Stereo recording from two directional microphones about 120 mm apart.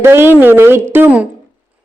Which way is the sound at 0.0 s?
20° right (ahead or behind).